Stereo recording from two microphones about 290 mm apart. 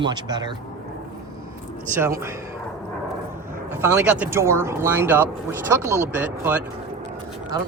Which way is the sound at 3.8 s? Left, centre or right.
Centre.